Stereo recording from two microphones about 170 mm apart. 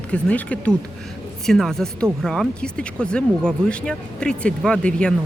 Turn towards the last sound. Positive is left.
turn(degrees=5)  # may be behind; listen again after turning